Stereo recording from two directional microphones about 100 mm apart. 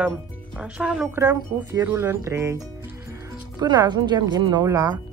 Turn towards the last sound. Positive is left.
turn(degrees=-45)  # may be behind; listen again after turning